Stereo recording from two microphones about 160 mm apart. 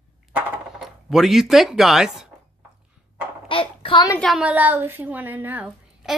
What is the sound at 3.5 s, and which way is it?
Speech, 35° left (ahead or behind).